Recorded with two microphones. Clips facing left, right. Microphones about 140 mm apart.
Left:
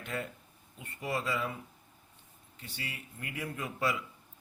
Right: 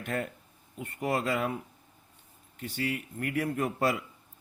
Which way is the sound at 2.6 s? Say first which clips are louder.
Right 12 dB; 50° right (ahead or behind).